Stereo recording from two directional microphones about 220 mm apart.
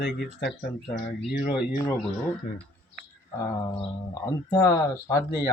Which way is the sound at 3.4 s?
15° left (ahead or behind).